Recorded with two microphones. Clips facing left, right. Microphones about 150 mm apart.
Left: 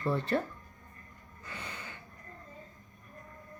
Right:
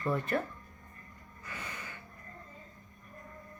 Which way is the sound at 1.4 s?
30° left (ahead or behind).